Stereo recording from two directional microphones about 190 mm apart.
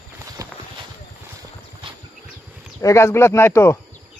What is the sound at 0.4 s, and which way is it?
Clip-clop, 20° right (ahead or behind).